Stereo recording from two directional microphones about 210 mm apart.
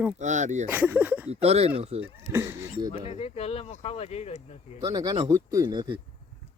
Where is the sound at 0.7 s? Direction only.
10° right (ahead or behind).